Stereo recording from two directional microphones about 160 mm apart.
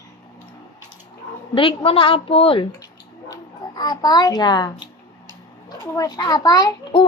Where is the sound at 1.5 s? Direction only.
35° left (ahead or behind).